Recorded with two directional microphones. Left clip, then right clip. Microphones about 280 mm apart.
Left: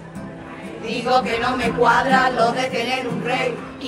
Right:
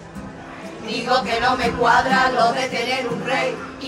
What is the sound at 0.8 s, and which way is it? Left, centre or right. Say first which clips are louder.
Speech: left 1 dB; centre.